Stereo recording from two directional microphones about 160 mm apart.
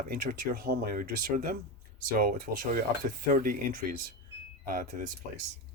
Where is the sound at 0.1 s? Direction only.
65° right (ahead or behind).